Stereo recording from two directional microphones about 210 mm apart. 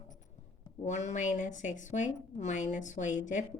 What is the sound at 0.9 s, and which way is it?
A woman's voice, 35° left (ahead or behind).